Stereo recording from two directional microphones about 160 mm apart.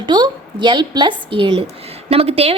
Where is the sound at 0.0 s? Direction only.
30° right (ahead or behind).